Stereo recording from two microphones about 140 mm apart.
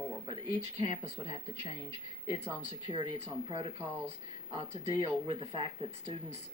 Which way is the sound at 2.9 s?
35° right (ahead or behind).